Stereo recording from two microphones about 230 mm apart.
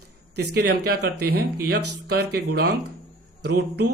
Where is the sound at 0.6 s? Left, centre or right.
Right.